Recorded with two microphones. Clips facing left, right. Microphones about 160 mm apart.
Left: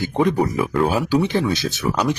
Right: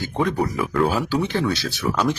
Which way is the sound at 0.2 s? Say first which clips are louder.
Left 3 dB; 20° left (ahead or behind).